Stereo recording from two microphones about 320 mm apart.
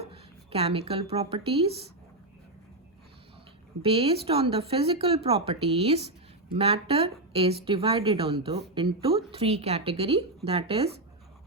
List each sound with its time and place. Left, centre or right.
0.0 s a sound: centre
1.1 s speech: centre
3.8 s speech: centre